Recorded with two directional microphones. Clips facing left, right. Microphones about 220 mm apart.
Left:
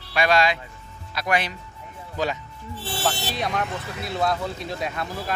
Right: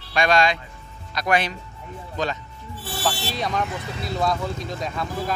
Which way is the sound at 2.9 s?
25° left (ahead or behind).